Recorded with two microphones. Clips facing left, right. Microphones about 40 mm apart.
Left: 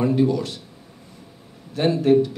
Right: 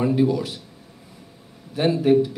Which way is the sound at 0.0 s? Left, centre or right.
Centre.